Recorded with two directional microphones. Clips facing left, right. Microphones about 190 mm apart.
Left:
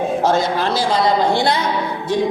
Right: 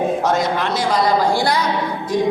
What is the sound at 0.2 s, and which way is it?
A woman's voice, 30° left (ahead or behind).